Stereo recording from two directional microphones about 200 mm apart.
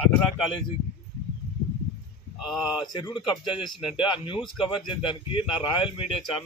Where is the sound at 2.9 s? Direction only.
25° left (ahead or behind).